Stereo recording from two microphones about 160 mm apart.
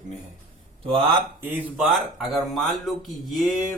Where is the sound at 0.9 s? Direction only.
30° right (ahead or behind).